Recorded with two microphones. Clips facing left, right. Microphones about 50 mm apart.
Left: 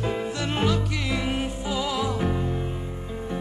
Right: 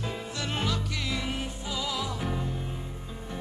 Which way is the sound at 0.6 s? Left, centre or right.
Left.